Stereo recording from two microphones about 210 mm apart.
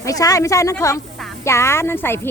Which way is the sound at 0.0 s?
15° left (ahead or behind).